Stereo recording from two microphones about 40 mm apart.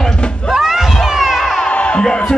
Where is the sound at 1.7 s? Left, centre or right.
Left.